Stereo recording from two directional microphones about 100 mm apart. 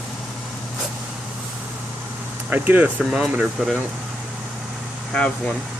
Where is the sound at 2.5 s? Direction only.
20° right (ahead or behind).